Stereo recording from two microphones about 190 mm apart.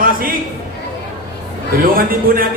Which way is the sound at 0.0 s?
50° right (ahead or behind).